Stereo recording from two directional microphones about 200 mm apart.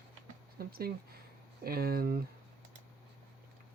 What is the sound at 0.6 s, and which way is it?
Speech, 50° right (ahead or behind).